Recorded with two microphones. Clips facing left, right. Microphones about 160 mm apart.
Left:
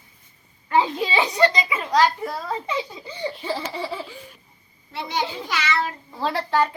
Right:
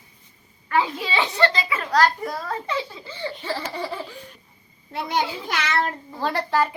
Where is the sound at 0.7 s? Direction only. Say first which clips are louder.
Left 2 dB; 20° left (ahead or behind).